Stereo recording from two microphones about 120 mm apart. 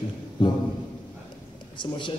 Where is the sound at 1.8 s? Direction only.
45° left (ahead or behind).